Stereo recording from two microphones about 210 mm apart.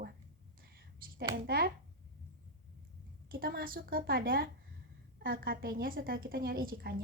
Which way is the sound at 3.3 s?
45° right (ahead or behind).